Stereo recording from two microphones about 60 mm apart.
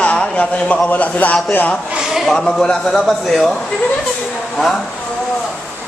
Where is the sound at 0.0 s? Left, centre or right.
Left.